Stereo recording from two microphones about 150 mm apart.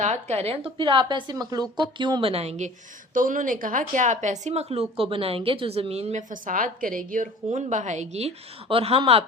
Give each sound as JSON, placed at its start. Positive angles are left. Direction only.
{"t": 0.0, "sound": "a woman's voice", "side_deg": -50}
{"t": 3.2, "sound": "a woman's voice", "side_deg": -65}